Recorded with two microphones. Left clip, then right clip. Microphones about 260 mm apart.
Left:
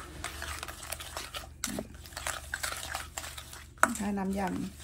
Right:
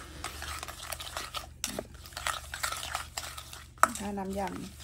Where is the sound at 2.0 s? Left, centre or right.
Centre.